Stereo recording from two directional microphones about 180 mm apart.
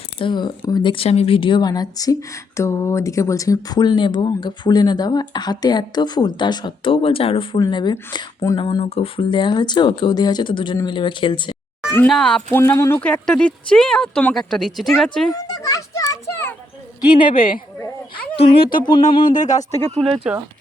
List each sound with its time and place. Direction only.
0.2 s speech: 25° left (ahead or behind)
12.0 s speech: 5° left (ahead or behind)
15.3 s children playing: 20° left (ahead or behind)
17.3 s speech: 50° left (ahead or behind)
18.3 s speech: 30° left (ahead or behind)
19.3 s speech: 45° left (ahead or behind)
20.3 s speech: 5° right (ahead or behind)